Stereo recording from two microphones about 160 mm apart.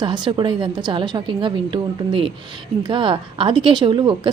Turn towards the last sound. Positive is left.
turn(degrees=-30)  # may be behind; listen again after turning